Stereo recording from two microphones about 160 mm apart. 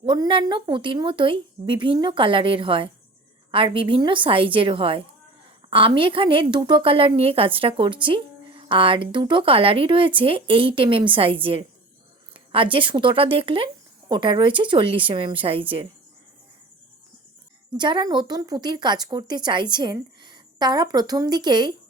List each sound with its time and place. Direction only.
0.0 s a woman's voice: 30° right (ahead or behind)
17.7 s a woman's voice: 30° right (ahead or behind)